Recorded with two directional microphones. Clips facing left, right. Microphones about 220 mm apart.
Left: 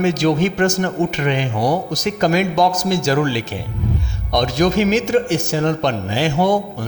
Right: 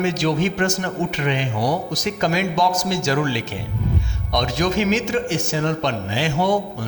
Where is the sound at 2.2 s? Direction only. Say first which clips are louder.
Left 5 dB; 40° left (ahead or behind).